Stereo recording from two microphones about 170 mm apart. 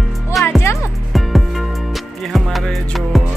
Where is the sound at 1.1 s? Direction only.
Centre (ahead or behind).